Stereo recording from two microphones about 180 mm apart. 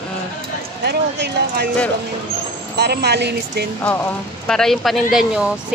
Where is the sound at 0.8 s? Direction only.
65° right (ahead or behind).